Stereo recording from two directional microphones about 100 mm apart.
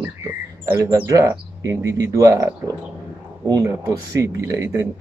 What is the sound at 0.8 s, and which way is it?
Speech, 35° right (ahead or behind).